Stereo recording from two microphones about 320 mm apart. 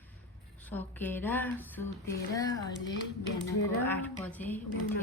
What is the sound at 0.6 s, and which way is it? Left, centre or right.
Speech, centre.